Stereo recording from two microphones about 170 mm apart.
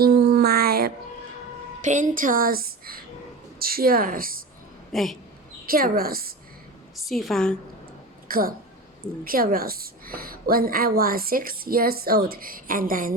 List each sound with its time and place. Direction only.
0.0 s music: 70° right (ahead or behind)
1.8 s a woman's voice: 45° right (ahead or behind)
4.9 s speech: centre (ahead or behind)
5.6 s a woman's voice: 60° right (ahead or behind)
6.9 s a woman's voice: centre (ahead or behind)
8.3 s a woman's voice: 55° right (ahead or behind)